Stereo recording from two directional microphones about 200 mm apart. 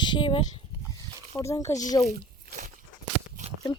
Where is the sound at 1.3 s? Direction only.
15° left (ahead or behind).